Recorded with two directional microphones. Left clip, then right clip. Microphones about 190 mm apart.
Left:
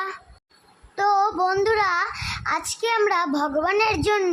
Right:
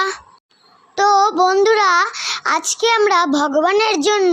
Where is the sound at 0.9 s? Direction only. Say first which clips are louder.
Right 7 dB; 35° right (ahead or behind).